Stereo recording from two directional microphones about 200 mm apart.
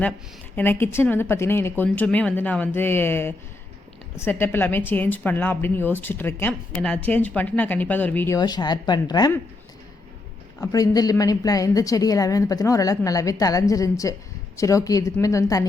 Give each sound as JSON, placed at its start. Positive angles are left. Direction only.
{"t": 0.5, "sound": "a woman's voice", "side_deg": 10}
{"t": 8.4, "sound": "a woman's voice", "side_deg": 20}
{"t": 10.6, "sound": "a woman's voice", "side_deg": 20}